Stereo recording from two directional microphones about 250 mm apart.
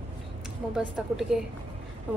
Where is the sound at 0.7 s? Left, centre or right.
Centre.